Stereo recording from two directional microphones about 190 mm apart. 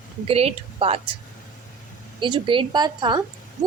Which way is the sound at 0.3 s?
30° right (ahead or behind).